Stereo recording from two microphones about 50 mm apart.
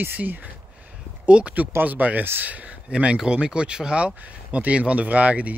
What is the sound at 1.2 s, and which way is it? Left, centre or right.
Speech, right.